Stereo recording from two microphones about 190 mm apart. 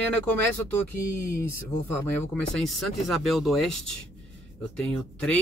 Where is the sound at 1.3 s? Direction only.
15° left (ahead or behind).